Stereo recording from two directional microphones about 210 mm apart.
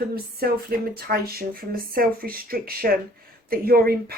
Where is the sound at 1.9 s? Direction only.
45° right (ahead or behind).